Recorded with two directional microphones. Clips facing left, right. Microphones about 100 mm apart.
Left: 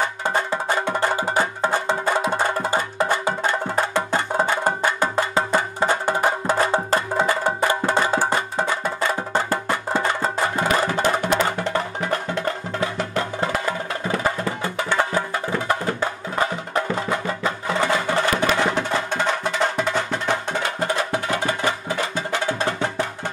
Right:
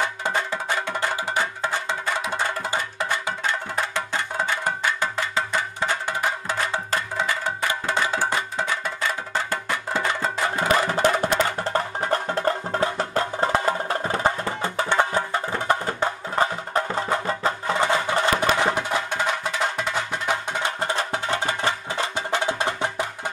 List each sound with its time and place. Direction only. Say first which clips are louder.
0.0 s music: left 2 dB; 40° left (ahead or behind)
11.1 s music: left 1 dB; 35° right (ahead or behind)
17.7 s music: left 3 dB; 20° right (ahead or behind)
18.8 s music: left 2 dB; 10° right (ahead or behind)
21.1 s music: left 2 dB; 25° right (ahead or behind)